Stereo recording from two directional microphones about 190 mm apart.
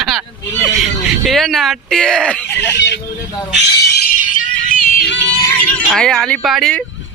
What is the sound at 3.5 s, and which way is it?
Speech, 60° left (ahead or behind).